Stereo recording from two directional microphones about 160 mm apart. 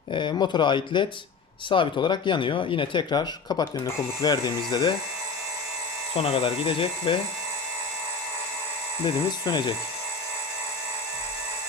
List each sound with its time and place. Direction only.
0.1 s speech: 30° left (ahead or behind)
6.1 s speech: 35° left (ahead or behind)
9.0 s speech: 30° left (ahead or behind)